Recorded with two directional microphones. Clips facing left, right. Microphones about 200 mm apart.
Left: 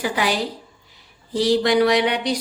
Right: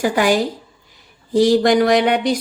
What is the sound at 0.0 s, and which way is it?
Speech, 45° right (ahead or behind).